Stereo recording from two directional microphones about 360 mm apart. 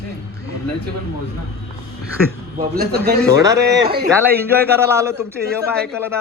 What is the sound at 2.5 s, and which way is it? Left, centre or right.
Speech, right.